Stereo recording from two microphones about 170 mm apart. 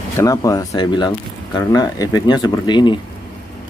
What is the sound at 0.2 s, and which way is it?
Speech, 20° left (ahead or behind).